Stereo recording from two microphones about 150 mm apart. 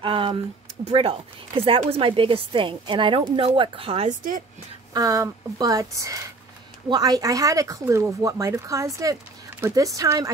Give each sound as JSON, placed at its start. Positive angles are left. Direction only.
{"t": 0.0, "sound": "a sound", "side_deg": -35}
{"t": 0.8, "sound": "speech", "side_deg": -40}
{"t": 4.9, "sound": "speech", "side_deg": -25}